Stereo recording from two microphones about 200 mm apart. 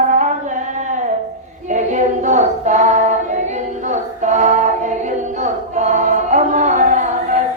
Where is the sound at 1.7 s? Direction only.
40° right (ahead or behind).